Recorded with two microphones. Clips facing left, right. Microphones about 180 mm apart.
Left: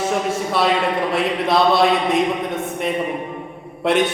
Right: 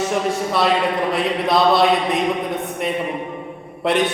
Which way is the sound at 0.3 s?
Centre (ahead or behind).